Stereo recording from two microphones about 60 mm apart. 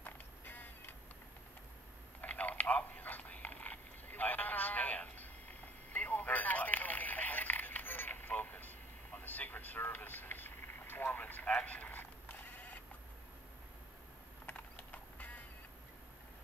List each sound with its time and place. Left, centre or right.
0.0 s music: left
2.2 s a sound: left
11.5 s bleat: left
14.4 s mechanisms: left